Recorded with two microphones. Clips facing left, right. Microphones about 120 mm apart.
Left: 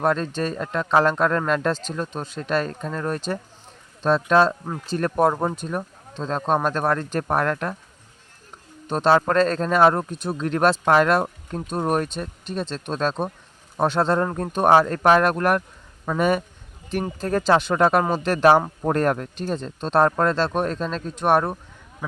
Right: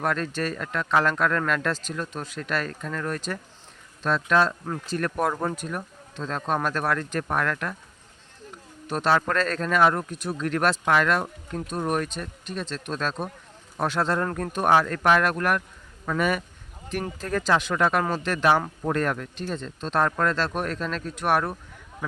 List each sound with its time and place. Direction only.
0.0 s speech: 30° left (ahead or behind)
8.9 s speech: 30° left (ahead or behind)